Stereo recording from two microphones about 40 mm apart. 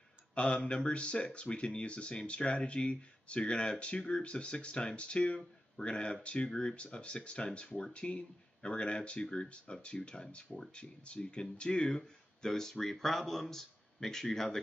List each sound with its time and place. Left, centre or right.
0.3 s speech: left
12.0 s speech: centre